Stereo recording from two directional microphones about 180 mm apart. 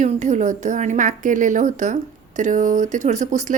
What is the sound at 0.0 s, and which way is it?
A woman's voice, 40° right (ahead or behind).